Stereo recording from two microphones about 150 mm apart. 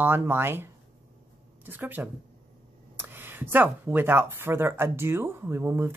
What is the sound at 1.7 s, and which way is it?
Speech, 10° right (ahead or behind).